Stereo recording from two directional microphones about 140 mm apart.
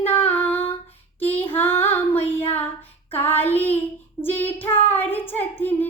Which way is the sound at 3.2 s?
15° left (ahead or behind).